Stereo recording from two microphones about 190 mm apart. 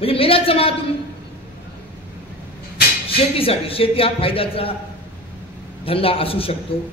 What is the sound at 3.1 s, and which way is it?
A man's voice, 30° left (ahead or behind).